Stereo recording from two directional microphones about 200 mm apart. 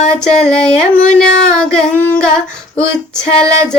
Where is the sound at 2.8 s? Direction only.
5° left (ahead or behind).